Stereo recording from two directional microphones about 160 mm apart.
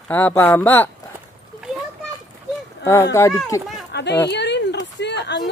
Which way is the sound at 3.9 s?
90° left.